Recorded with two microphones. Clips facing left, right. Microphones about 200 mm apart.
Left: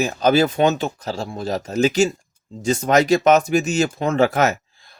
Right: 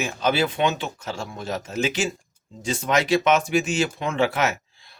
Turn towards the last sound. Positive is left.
turn(degrees=45)  # may be behind; listen again after turning